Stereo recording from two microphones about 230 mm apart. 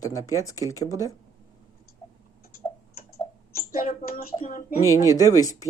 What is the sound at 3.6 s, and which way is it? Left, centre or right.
Speech, left.